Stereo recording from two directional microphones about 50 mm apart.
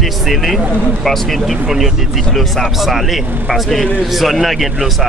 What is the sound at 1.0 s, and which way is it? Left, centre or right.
Speech, centre.